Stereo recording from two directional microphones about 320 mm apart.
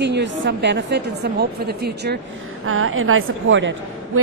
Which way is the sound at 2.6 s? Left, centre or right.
Right.